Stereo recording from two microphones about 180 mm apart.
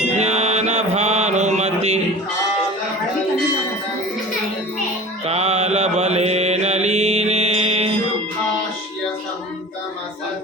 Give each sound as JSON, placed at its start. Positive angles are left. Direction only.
{"t": 0.2, "sound": "mantra", "side_deg": -35}
{"t": 5.2, "sound": "mantra", "side_deg": -35}